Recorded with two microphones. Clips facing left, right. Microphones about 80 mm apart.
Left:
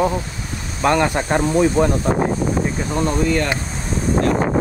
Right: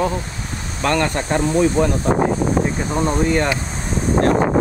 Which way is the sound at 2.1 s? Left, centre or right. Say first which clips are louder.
Right 2 dB; right.